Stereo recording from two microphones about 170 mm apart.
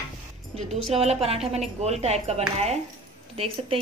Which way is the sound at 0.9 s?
40° right (ahead or behind).